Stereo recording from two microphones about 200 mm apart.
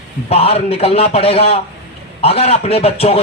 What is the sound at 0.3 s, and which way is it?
Speech, 30° left (ahead or behind).